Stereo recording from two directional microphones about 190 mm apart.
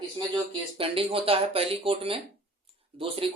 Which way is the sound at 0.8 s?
30° right (ahead or behind).